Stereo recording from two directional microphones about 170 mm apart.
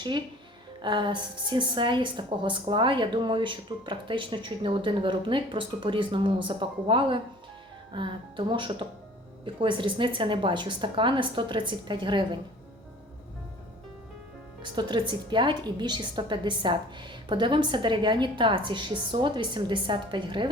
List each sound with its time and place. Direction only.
0.8 s a woman's voice: 25° right (ahead or behind)
14.6 s a woman's voice: 25° right (ahead or behind)